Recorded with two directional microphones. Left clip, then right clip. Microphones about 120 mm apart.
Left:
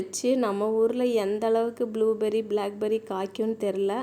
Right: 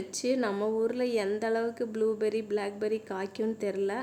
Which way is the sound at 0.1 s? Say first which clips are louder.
Left 4 dB; 35° left (ahead or behind).